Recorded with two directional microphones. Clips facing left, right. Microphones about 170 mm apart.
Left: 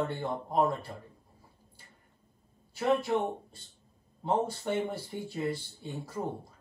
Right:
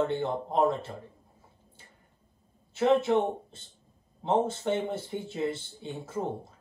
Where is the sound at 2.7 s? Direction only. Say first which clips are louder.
Right 4 dB; 25° right (ahead or behind).